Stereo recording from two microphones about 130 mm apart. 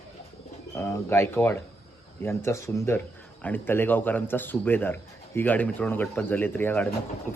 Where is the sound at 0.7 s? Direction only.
20° left (ahead or behind).